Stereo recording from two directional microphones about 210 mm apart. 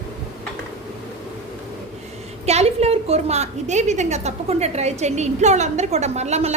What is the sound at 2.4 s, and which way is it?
A woman's voice, 30° right (ahead or behind).